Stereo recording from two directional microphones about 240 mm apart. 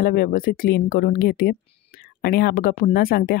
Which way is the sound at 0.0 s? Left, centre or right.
Left.